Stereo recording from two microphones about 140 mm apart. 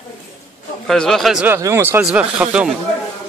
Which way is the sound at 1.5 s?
20° right (ahead or behind).